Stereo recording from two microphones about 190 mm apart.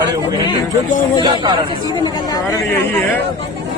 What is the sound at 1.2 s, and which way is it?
Speech, 25° right (ahead or behind).